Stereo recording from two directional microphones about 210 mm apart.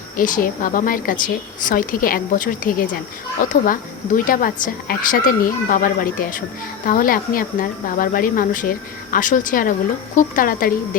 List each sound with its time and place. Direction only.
0.2 s a woman's voice: 40° left (ahead or behind)